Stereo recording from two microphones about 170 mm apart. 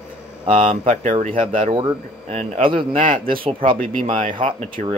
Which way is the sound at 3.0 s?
55° right (ahead or behind).